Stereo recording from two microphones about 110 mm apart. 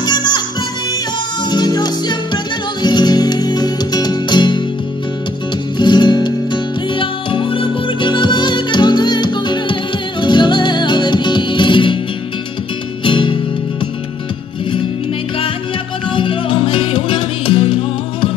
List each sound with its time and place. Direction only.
0.0 s music: 40° left (ahead or behind)
1.4 s music: 40° left (ahead or behind)
5.8 s music: 45° left (ahead or behind)
13.0 s music: 50° left (ahead or behind)
16.1 s music: 50° left (ahead or behind)